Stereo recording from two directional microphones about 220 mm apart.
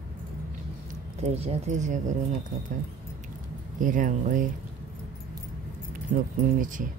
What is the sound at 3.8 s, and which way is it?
Speech, 35° right (ahead or behind).